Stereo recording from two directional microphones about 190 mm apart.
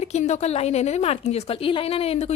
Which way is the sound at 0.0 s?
35° left (ahead or behind).